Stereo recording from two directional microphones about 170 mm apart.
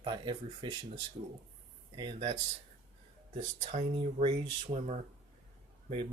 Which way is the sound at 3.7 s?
35° right (ahead or behind).